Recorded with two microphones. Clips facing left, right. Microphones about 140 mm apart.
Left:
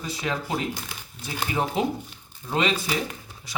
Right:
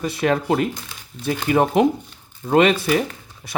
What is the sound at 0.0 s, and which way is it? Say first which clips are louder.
Speech: right 9 dB; 60° right (ahead or behind).